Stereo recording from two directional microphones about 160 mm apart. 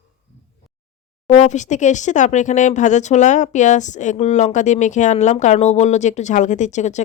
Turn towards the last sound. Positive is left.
turn(degrees=45)  # may be behind; listen again after turning